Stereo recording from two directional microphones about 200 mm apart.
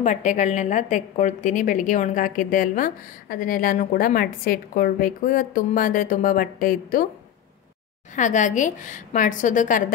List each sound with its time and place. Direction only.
0.0 s a woman's voice: 40° left (ahead or behind)
8.2 s a woman's voice: 40° left (ahead or behind)